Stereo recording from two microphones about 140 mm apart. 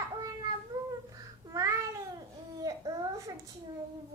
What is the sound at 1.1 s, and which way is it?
Babbling, 20° right (ahead or behind).